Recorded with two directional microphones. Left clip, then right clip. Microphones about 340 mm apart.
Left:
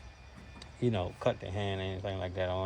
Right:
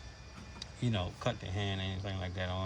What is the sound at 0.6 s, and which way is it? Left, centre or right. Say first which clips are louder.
Speech: left 5 dB; centre.